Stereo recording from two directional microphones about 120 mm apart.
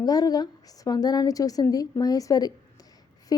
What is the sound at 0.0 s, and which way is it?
A woman's voice, 35° left (ahead or behind).